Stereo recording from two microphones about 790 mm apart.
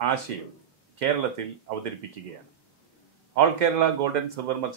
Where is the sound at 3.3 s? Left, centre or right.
Right.